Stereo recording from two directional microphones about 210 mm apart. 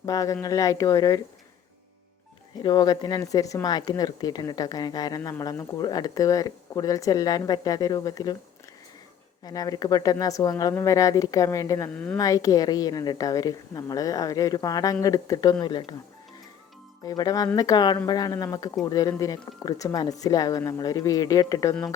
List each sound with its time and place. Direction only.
0.0 s a woman's voice: 15° left (ahead or behind)
2.6 s a woman's voice: 20° left (ahead or behind)
9.4 s a woman's voice: 20° left (ahead or behind)
11.9 s a woman's voice: 5° left (ahead or behind)
12.1 s a woman's voice: 15° left (ahead or behind)
17.0 s a woman's voice: 15° left (ahead or behind)